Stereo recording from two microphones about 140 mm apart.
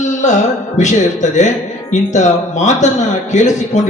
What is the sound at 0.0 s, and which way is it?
Music, 60° left (ahead or behind).